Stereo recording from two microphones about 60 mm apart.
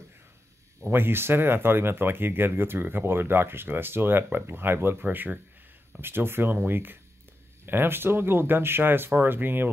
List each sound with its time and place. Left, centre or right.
0.7 s speech: right
5.9 s speech: right